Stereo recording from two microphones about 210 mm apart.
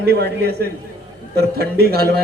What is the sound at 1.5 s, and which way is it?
Speech, 50° right (ahead or behind).